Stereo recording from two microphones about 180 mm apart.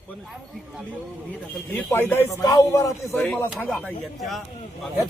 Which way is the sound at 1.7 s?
10° left (ahead or behind).